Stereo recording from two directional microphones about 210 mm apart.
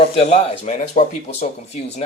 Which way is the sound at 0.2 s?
30° left (ahead or behind).